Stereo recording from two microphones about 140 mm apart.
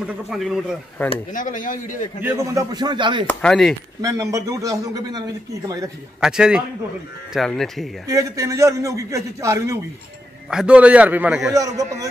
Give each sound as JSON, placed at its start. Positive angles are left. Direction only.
{"t": 0.0, "sound": "speech", "side_deg": -5}
{"t": 1.3, "sound": "speech", "side_deg": 70}
{"t": 2.2, "sound": "speech", "side_deg": -20}
{"t": 3.3, "sound": "speech", "side_deg": 5}
{"t": 4.0, "sound": "a man's voice", "side_deg": -25}
{"t": 6.2, "sound": "speech", "side_deg": -5}
{"t": 8.1, "sound": "a man's voice", "side_deg": -25}
{"t": 10.5, "sound": "a man's voice", "side_deg": -5}
{"t": 11.5, "sound": "a man's voice", "side_deg": -25}